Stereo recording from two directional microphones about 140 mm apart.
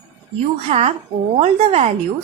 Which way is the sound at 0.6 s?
50° right (ahead or behind).